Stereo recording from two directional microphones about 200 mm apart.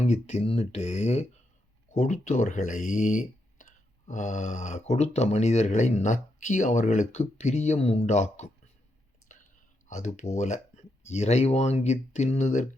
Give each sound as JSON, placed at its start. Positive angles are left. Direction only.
{"t": 0.0, "sound": "speech", "side_deg": 35}
{"t": 9.3, "sound": "whispering", "side_deg": 40}
{"t": 9.9, "sound": "speech", "side_deg": 40}